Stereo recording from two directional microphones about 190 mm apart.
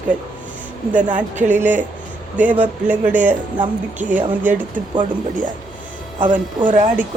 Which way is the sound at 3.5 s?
40° right (ahead or behind).